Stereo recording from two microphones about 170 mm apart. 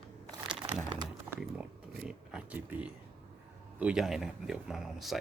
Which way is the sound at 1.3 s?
5° right (ahead or behind).